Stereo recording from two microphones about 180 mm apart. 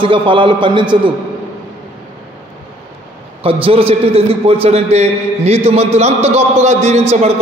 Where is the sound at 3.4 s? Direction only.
30° right (ahead or behind).